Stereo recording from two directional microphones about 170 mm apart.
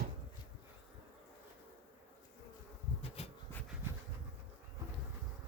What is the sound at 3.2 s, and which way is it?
Bee, 40° left (ahead or behind).